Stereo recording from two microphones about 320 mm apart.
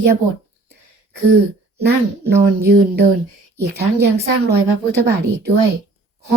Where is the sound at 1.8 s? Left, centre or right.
Right.